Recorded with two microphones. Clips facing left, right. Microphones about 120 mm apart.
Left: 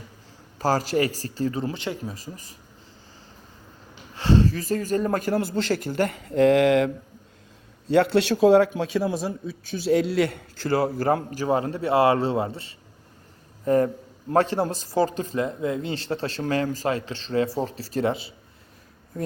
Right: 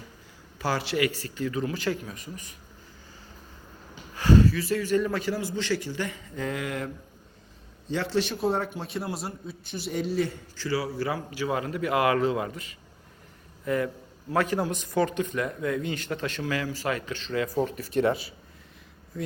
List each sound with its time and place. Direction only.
0.6 s a man's voice: 40° left (ahead or behind)
4.1 s speech: 30° left (ahead or behind); by 6.9 s 90° left
7.9 s a man's voice: 80° left
9.9 s a man's voice: 75° left (ahead or behind); by 18.3 s 25° left (ahead or behind)